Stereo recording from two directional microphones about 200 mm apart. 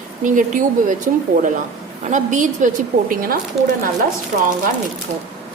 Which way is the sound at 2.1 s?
40° right (ahead or behind).